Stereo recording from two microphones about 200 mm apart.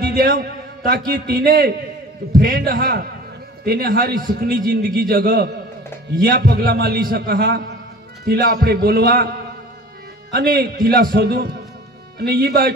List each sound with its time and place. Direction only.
0.0 s a man's voice: 45° right (ahead or behind)
10.3 s a man's voice: 50° right (ahead or behind)